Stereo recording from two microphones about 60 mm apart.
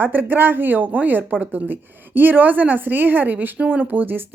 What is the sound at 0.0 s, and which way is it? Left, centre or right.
A woman's voice, right.